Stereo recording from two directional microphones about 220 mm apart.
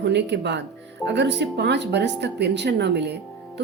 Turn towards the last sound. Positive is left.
turn(degrees=-50)  # may be behind; listen again after turning